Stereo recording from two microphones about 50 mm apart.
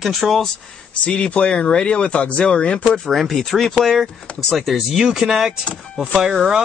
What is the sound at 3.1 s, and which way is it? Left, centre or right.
Speech, centre.